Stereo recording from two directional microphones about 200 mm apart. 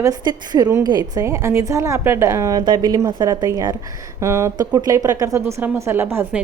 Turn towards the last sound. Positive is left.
turn(degrees=-10)  # may be behind; listen again after turning